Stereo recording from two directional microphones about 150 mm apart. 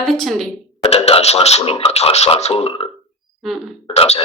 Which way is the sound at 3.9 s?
40° left (ahead or behind).